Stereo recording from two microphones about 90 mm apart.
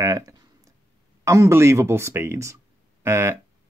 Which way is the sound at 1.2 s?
35° right (ahead or behind).